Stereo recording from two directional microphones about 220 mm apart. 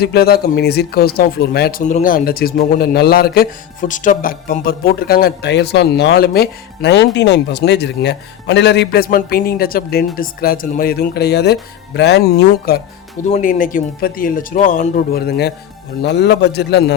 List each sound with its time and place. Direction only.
0.0 s speech: 45° left (ahead or behind)